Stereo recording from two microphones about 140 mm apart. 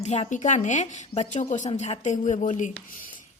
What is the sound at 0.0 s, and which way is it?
A woman's voice, 55° left (ahead or behind).